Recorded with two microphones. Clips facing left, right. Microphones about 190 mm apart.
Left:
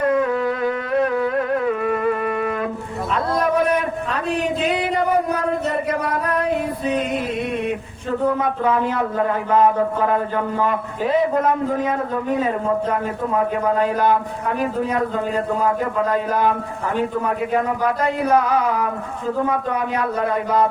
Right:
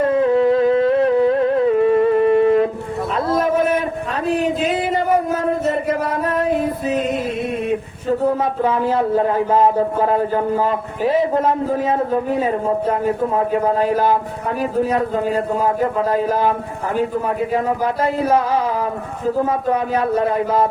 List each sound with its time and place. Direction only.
0.0 s music: 30° right (ahead or behind)
4.4 s a sound: centre (ahead or behind)
6.1 s music: 25° right (ahead or behind)
8.2 s speech: 25° right (ahead or behind)
13.7 s a man's voice: 30° right (ahead or behind)
16.0 s speech: 30° right (ahead or behind)
17.8 s speech: 25° right (ahead or behind)